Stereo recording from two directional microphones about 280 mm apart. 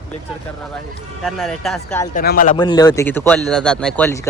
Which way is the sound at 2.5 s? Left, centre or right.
Centre.